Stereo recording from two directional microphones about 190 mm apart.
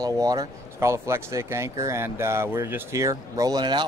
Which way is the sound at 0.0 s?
20° right (ahead or behind).